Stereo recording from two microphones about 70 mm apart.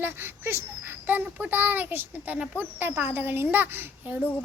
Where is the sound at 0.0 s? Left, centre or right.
Right.